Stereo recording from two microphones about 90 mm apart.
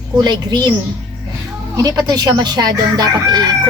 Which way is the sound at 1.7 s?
45° right (ahead or behind).